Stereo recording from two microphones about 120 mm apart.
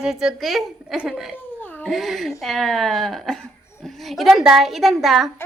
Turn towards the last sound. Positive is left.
turn(degrees=0)  # may be behind; listen again after turning